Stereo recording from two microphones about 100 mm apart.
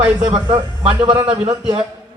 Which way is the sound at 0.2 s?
50° right (ahead or behind).